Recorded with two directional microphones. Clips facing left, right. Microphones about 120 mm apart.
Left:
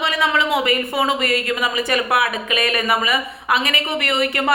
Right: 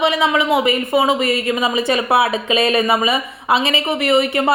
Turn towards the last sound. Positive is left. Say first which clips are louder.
# right 5 dB
turn(degrees=-20)  # may be behind; listen again after turning